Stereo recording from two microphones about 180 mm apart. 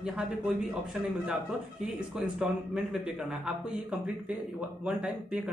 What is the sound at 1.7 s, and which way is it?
A man's voice, 5° right (ahead or behind).